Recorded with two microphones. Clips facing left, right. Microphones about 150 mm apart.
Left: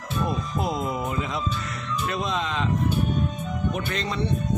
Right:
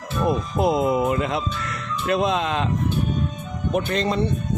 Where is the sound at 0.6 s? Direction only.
65° right (ahead or behind).